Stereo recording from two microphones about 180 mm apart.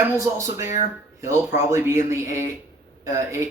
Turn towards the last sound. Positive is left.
turn(degrees=-15)  # may be behind; listen again after turning